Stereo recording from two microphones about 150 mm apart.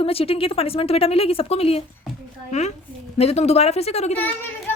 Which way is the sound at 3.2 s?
45° left (ahead or behind).